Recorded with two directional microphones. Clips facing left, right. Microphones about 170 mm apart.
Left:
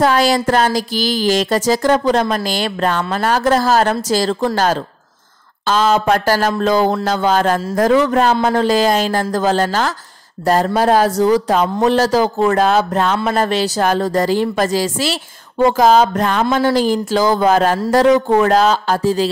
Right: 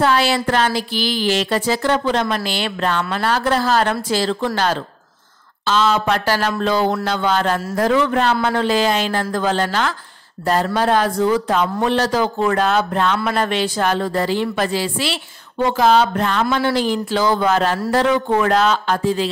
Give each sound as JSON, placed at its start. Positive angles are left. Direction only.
{"t": 0.0, "sound": "speech", "side_deg": 40}